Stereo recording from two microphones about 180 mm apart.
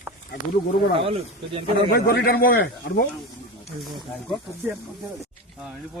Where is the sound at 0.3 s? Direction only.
50° left (ahead or behind).